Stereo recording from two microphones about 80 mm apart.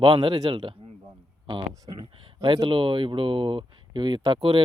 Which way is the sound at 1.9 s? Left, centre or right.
Right.